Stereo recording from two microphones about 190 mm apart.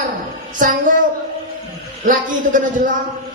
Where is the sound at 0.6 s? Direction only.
45° right (ahead or behind).